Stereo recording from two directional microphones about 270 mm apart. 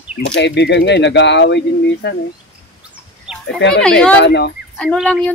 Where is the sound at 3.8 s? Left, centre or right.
Centre.